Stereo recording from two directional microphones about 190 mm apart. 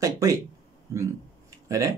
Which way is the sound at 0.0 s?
15° right (ahead or behind).